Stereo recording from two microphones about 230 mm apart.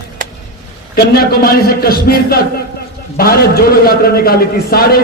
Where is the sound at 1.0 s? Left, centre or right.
Left.